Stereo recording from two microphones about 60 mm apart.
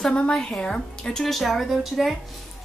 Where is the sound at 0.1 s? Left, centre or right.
Centre.